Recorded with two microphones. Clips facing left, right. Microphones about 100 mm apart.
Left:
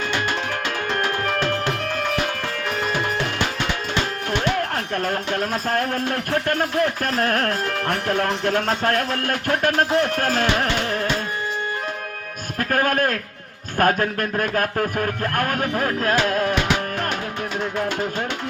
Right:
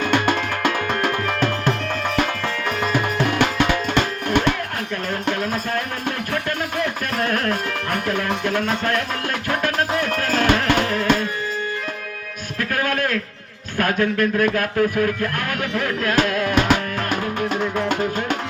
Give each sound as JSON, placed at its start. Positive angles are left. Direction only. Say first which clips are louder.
{"t": 0.1, "sound": "music", "louder": "right 4 dB", "side_deg": -55}
{"t": 3.9, "sound": "music", "louder": "right 4 dB", "side_deg": -55}
{"t": 5.3, "sound": "music", "louder": "right 2 dB", "side_deg": 50}
{"t": 10.3, "sound": "music", "louder": "right 3 dB", "side_deg": -50}
{"t": 12.5, "sound": "music", "louder": "left 2 dB", "side_deg": 40}
{"t": 13.7, "sound": "speech", "louder": "even", "side_deg": 40}